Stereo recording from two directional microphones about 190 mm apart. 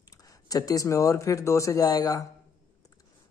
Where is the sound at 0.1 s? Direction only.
20° left (ahead or behind).